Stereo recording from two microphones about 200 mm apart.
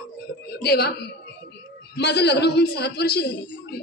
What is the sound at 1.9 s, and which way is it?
A man's voice, 55° left (ahead or behind).